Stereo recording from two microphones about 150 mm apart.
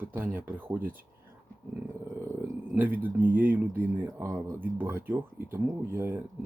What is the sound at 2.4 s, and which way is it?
Speech, 10° right (ahead or behind).